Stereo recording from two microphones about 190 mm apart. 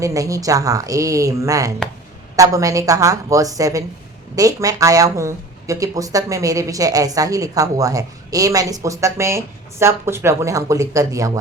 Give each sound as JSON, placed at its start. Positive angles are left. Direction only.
{"t": 0.0, "sound": "speech", "side_deg": -15}